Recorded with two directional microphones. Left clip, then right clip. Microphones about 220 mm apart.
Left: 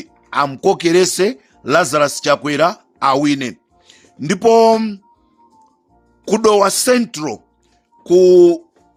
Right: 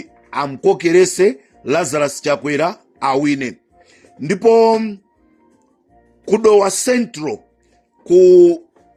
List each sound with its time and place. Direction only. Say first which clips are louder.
0.0 s speech: left 4 dB; 25° left (ahead or behind)
6.2 s speech: right 1 dB; 30° left (ahead or behind)